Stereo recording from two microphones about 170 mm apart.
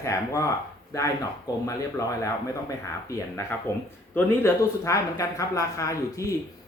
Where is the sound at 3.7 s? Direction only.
15° left (ahead or behind).